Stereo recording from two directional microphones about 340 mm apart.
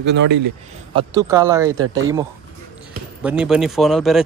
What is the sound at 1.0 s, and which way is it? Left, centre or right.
Speech, centre.